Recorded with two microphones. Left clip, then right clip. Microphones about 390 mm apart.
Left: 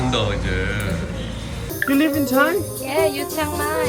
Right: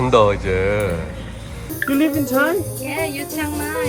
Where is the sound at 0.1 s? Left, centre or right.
Centre.